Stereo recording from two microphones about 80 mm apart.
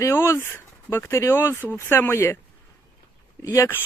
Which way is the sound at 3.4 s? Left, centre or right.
Left.